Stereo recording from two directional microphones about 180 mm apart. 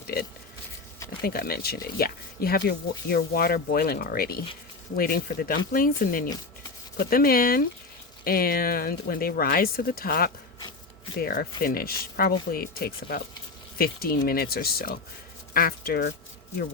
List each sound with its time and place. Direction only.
1.2 s speech: 55° left (ahead or behind)